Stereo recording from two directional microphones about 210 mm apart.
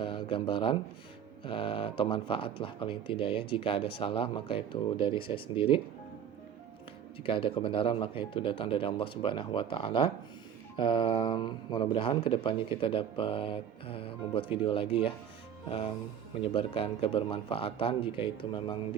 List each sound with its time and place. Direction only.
0.0 s speech: 25° left (ahead or behind)
7.3 s speech: 25° left (ahead or behind)
16.4 s speech: 25° left (ahead or behind)